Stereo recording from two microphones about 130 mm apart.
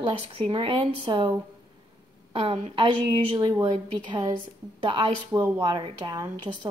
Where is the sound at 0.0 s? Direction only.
40° right (ahead or behind).